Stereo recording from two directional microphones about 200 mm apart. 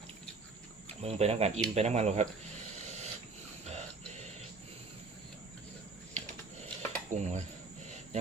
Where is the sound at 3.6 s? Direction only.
35° right (ahead or behind).